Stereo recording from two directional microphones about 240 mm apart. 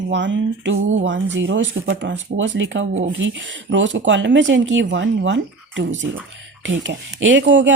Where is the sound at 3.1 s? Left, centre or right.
Right.